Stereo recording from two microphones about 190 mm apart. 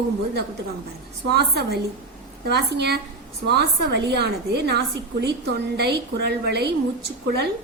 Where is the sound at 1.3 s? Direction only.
60° right (ahead or behind).